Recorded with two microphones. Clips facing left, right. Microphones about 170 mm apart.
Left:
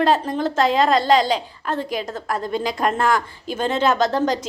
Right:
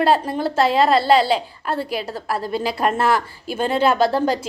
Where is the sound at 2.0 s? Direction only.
35° right (ahead or behind).